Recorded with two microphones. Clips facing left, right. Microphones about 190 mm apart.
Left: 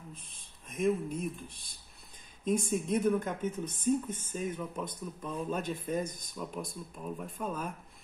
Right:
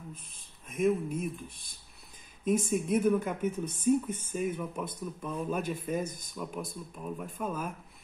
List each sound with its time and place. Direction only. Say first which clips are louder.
0.7 s speech: right 2 dB; centre (ahead or behind)
2.4 s speech: right 2 dB; 5° right (ahead or behind)